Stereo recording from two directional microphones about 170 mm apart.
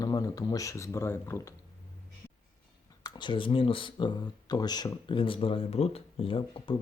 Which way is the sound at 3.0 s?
25° left (ahead or behind).